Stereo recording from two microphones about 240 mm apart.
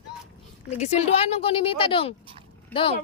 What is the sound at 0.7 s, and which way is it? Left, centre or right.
Speech, left.